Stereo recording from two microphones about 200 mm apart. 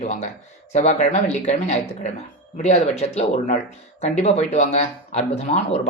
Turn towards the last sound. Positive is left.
turn(degrees=35)  # may be behind; listen again after turning